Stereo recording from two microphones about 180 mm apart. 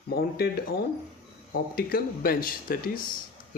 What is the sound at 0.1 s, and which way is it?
Speech, 60° left (ahead or behind).